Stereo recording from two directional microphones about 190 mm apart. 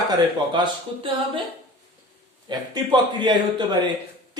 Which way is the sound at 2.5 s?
25° right (ahead or behind).